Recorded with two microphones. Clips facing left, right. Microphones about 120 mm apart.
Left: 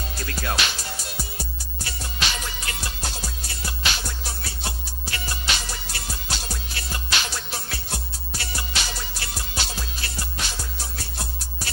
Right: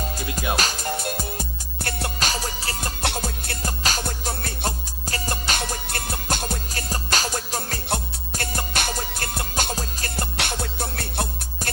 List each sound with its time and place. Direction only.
0.2 s music: 15° right (ahead or behind)
0.6 s music: 45° right (ahead or behind)
2.1 s music: 40° right (ahead or behind)
3.0 s music: 60° right (ahead or behind); by 10.2 s 45° right (ahead or behind)
10.3 s music: 60° right (ahead or behind)